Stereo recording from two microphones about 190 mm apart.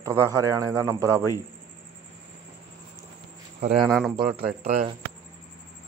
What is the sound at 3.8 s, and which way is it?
Speech, centre (ahead or behind).